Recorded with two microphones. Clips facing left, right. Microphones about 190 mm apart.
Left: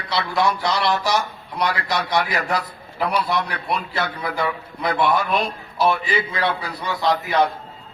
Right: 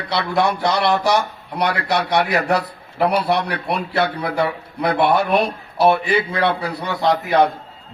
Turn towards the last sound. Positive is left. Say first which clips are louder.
# right 3 dB
turn(degrees=-60)  # may be behind; listen again after turning